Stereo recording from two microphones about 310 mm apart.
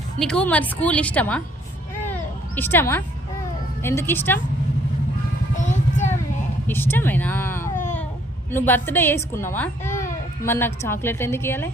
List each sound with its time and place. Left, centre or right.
0.2 s speech: centre
2.6 s a woman's voice: centre
5.5 s a sound: left
6.7 s a woman's voice: centre